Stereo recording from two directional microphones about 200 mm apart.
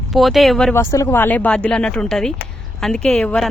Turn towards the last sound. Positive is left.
turn(degrees=5)  # may be behind; listen again after turning